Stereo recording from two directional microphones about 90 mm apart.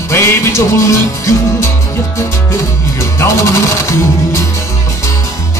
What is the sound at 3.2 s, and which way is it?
Music, 30° left (ahead or behind).